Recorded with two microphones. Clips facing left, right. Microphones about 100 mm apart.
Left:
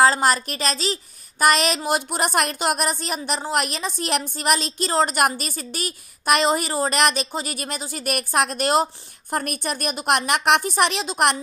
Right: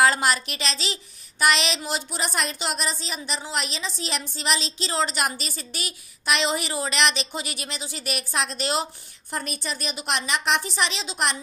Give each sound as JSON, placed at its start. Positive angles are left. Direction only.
{"t": 0.0, "sound": "a woman's voice", "side_deg": 35}